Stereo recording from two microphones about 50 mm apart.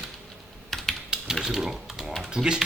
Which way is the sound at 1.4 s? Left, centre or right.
Centre.